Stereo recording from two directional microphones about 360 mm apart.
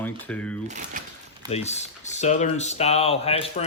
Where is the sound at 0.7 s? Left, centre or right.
Centre.